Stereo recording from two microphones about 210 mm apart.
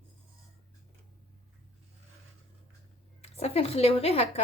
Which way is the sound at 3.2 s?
30° left (ahead or behind).